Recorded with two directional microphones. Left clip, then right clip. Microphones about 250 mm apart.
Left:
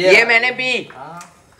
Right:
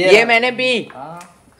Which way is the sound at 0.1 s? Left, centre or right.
Centre.